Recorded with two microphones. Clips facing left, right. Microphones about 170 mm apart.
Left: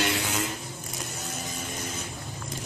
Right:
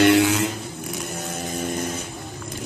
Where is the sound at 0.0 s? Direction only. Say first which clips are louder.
Right 13 dB; 75° right (ahead or behind).